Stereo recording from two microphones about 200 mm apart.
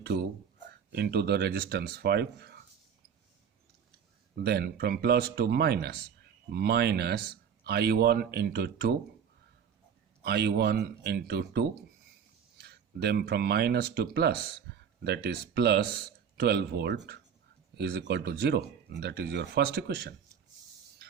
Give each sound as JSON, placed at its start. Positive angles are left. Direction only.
{"t": 0.9, "sound": "speech", "side_deg": -55}
{"t": 4.4, "sound": "speech", "side_deg": -50}
{"t": 10.2, "sound": "speech", "side_deg": -55}
{"t": 14.7, "sound": "a sound", "side_deg": -55}
{"t": 15.0, "sound": "speech", "side_deg": -55}